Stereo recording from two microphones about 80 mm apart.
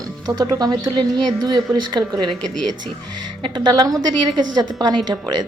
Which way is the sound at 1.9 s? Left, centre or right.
Right.